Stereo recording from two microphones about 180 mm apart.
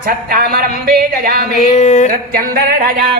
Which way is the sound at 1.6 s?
40° left (ahead or behind).